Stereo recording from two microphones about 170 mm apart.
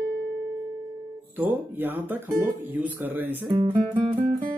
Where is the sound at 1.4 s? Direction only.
10° right (ahead or behind).